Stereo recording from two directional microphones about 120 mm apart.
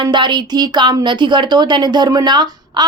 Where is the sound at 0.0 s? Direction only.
40° right (ahead or behind).